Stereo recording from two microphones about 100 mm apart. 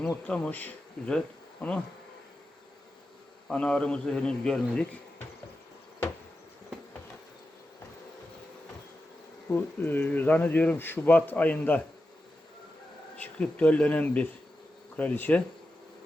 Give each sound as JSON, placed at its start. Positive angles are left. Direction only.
{"t": 0.3, "sound": "speech", "side_deg": 15}
{"t": 3.5, "sound": "speech", "side_deg": 10}
{"t": 9.5, "sound": "speech", "side_deg": 20}
{"t": 13.1, "sound": "speech", "side_deg": 15}